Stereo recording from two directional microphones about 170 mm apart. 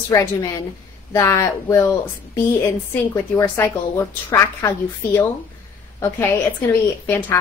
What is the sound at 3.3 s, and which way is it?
Speech, 15° left (ahead or behind).